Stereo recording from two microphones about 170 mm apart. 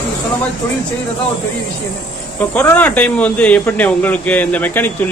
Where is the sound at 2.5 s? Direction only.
10° left (ahead or behind).